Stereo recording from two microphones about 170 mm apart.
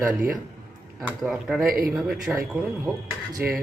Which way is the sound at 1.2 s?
Centre (ahead or behind).